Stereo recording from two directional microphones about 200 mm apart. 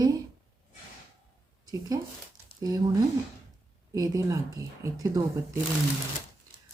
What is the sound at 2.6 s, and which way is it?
A woman's voice, 20° right (ahead or behind).